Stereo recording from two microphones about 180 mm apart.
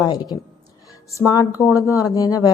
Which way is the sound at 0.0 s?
20° left (ahead or behind).